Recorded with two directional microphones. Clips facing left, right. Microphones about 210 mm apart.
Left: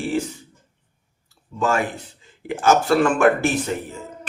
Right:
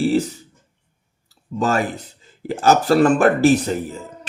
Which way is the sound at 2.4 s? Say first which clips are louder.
Right 2 dB; 35° right (ahead or behind).